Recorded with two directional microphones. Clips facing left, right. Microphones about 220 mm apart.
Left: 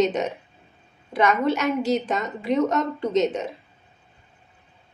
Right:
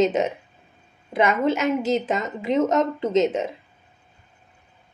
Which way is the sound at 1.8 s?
90° right.